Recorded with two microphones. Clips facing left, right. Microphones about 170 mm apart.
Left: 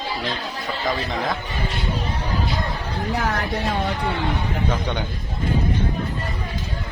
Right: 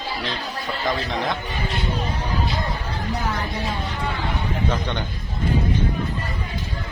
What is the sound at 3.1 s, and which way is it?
Speech, 70° left (ahead or behind).